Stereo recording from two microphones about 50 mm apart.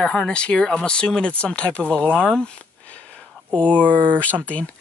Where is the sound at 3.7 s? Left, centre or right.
Right.